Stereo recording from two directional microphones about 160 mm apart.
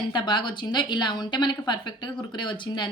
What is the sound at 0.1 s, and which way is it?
A woman's voice, 30° left (ahead or behind).